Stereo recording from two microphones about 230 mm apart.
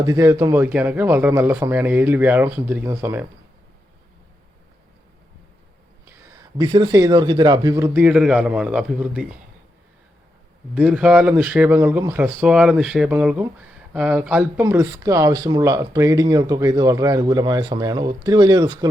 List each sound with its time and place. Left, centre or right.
0.0 s speech: centre
6.6 s speech: centre
10.8 s speech: centre